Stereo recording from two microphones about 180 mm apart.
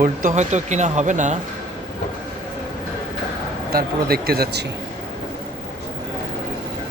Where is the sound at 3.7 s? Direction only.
55° right (ahead or behind).